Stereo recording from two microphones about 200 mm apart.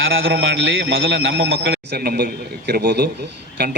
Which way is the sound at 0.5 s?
70° right (ahead or behind).